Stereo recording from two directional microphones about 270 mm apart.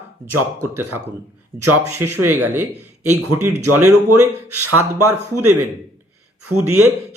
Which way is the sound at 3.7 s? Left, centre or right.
Centre.